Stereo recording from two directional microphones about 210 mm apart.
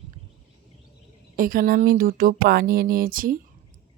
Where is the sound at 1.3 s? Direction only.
40° right (ahead or behind).